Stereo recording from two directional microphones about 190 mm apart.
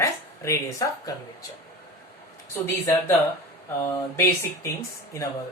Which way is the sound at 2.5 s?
15° left (ahead or behind).